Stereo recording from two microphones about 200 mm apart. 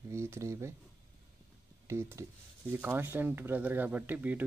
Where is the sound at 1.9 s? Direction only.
15° right (ahead or behind).